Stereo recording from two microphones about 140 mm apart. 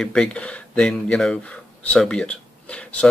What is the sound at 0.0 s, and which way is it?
Speech, 5° left (ahead or behind).